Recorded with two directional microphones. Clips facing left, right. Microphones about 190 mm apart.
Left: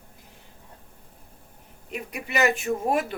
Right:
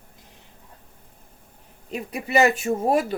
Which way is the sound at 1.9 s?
35° right (ahead or behind).